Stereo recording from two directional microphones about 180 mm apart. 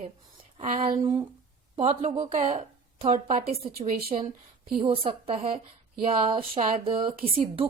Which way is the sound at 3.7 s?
50° right (ahead or behind).